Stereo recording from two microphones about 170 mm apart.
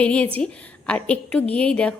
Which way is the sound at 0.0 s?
5° left (ahead or behind).